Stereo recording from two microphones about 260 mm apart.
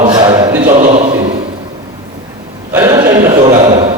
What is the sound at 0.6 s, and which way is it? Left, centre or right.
Speech, right.